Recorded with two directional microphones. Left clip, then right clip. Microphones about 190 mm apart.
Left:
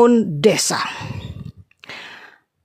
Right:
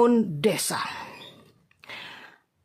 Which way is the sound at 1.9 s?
35° left (ahead or behind).